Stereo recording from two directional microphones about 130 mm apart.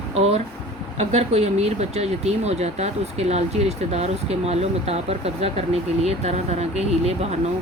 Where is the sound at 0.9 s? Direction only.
55° right (ahead or behind).